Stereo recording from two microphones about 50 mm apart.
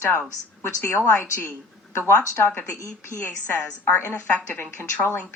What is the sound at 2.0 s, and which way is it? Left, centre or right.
Speech, left.